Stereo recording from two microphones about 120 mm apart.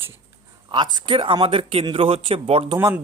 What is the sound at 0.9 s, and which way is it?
Speech, 45° right (ahead or behind).